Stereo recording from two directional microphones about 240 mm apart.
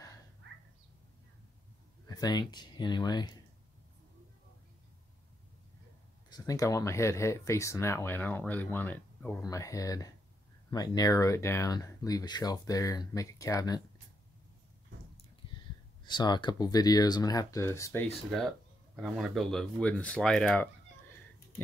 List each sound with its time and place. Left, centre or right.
2.0 s speech: centre
6.3 s speech: centre
16.0 s speech: centre